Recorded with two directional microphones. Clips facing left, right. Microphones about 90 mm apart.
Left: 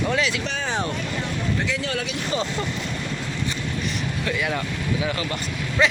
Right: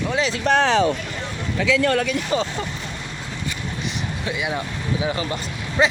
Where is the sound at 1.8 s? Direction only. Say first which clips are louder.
Right 8 dB; 55° right (ahead or behind).